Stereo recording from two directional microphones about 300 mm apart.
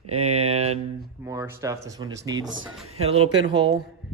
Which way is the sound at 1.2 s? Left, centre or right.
Centre.